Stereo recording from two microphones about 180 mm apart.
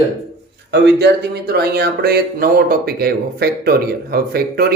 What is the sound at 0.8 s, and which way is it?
Speech, 65° right (ahead or behind).